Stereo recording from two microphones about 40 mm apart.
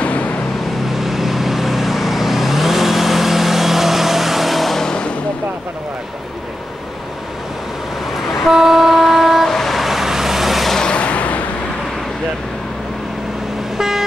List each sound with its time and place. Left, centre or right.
0.0 s vehicle: left
0.8 s vehicle: centre
4.8 s vehicle: left
8.5 s vehicle: centre
9.5 s vehicle: centre
9.8 s vehicle: centre
10.8 s vehicle: left
13.7 s vehicle: centre